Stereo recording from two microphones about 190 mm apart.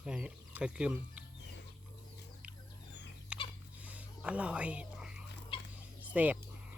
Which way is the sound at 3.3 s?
5° right (ahead or behind).